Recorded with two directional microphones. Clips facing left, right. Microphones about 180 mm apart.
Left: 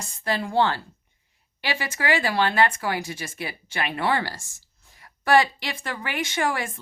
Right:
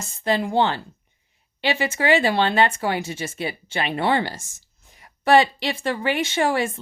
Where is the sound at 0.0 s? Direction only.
20° right (ahead or behind).